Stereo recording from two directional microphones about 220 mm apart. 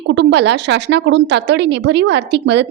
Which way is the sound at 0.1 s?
55° right (ahead or behind).